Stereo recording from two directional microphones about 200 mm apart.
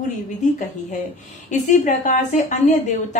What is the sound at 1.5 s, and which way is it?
A woman's voice, 40° left (ahead or behind).